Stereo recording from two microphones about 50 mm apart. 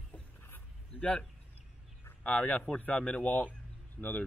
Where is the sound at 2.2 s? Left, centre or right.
Left.